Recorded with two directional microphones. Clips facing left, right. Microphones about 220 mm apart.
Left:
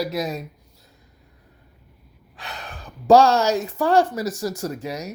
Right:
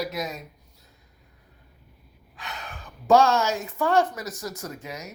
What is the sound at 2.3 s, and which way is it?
A woman's voice, 35° left (ahead or behind).